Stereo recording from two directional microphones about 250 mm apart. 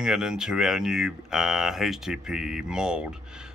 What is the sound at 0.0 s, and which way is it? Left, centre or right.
Speech, centre.